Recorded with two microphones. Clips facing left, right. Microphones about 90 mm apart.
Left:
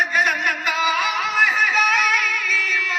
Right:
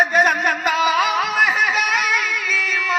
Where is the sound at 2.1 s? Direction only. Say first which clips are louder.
Right 1 dB; 35° right (ahead or behind).